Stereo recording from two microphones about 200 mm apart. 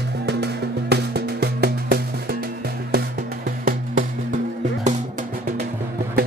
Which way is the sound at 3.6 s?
40° right (ahead or behind).